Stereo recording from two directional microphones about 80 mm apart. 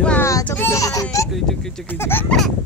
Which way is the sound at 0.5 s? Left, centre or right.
Left.